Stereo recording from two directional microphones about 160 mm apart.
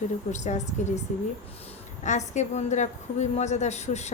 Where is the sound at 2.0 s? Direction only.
50° left (ahead or behind).